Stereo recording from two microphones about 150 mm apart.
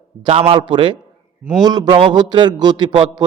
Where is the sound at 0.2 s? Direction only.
35° right (ahead or behind).